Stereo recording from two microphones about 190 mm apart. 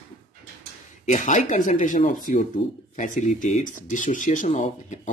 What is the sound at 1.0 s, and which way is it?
Speech, 40° left (ahead or behind).